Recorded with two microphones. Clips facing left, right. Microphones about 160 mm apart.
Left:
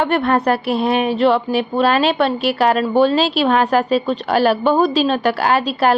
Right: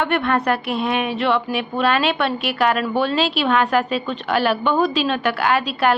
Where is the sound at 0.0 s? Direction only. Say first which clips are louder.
Left 3 dB; 35° left (ahead or behind).